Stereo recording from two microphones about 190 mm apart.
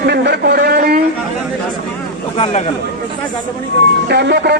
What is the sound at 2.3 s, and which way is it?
Speech, 30° left (ahead or behind).